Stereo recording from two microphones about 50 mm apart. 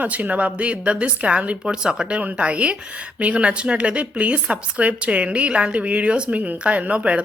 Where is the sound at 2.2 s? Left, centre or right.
Right.